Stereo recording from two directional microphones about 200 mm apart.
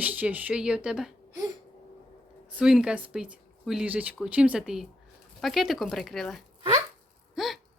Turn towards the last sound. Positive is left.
turn(degrees=0)  # may be behind; listen again after turning